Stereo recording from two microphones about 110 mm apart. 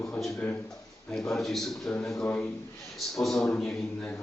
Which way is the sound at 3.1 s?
Centre (ahead or behind).